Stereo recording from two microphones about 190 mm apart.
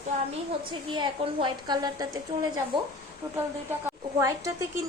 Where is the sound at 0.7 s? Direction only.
25° right (ahead or behind).